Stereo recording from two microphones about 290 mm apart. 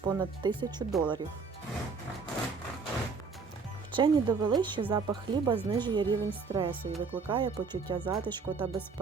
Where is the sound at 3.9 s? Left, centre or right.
Centre.